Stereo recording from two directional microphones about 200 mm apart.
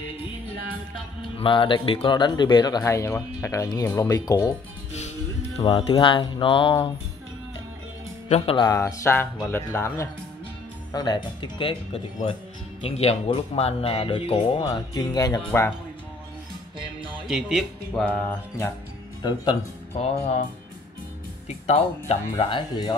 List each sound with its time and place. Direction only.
1.3 s speech: 25° left (ahead or behind)
5.6 s speech: 30° left (ahead or behind)
8.3 s speech: 30° left (ahead or behind); by 15.7 s 15° left (ahead or behind)
17.1 s speech: centre (ahead or behind)
19.2 s speech: 20° left (ahead or behind)
21.5 s speech: 35° left (ahead or behind)